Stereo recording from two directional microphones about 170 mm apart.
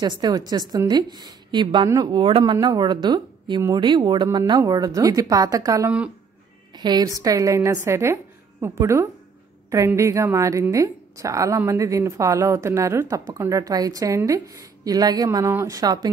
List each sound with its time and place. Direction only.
0.0 s a woman's voice: 25° right (ahead or behind)